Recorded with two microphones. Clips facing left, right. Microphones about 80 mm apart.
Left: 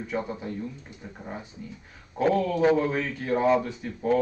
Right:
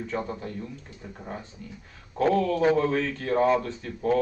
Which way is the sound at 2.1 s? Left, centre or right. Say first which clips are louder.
Right 1 dB; centre.